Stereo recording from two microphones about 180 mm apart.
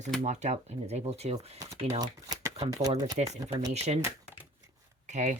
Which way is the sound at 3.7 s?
35° right (ahead or behind).